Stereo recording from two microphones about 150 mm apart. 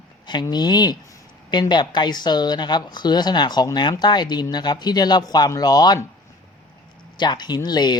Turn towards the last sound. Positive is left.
turn(degrees=25)  # may be behind; listen again after turning